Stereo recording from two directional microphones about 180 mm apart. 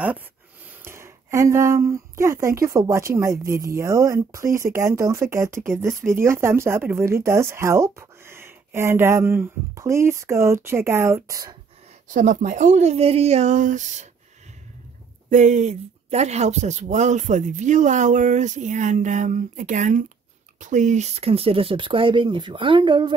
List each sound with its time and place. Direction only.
0.8 s speech: 15° right (ahead or behind)
12.1 s speech: 45° right (ahead or behind)
15.2 s speech: 40° right (ahead or behind); by 23.1 s 25° right (ahead or behind)